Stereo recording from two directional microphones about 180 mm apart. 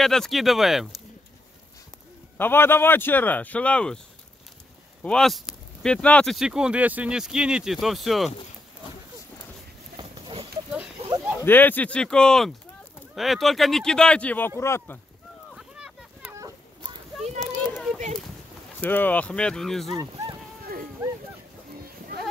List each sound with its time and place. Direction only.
0.0 s speech: centre (ahead or behind)
2.3 s speech: 10° left (ahead or behind)
5.0 s speech: 5° left (ahead or behind)
9.9 s a sound: 30° right (ahead or behind)
11.4 s speech: 10° left (ahead or behind)
15.5 s a sound: 5° right (ahead or behind)
17.4 s children playing: centre (ahead or behind)
18.8 s speech: 10° left (ahead or behind)
21.0 s a sound: 15° right (ahead or behind)